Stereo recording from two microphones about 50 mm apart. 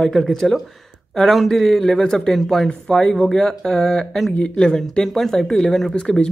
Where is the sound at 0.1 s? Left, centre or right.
Centre.